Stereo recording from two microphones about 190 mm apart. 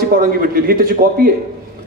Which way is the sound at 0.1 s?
50° right (ahead or behind).